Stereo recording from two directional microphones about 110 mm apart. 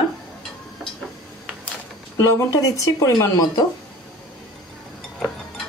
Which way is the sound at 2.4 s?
30° left (ahead or behind).